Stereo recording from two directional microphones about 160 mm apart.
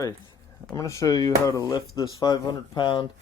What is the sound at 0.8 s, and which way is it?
Speech, 20° left (ahead or behind).